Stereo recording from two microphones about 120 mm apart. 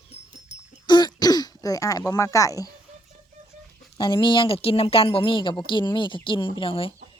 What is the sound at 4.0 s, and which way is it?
Speech, 40° left (ahead or behind).